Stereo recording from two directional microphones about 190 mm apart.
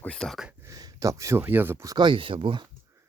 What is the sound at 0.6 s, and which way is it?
Speech, 20° right (ahead or behind).